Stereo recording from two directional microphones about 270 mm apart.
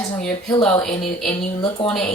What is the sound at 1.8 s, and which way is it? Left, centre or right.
Speech, centre.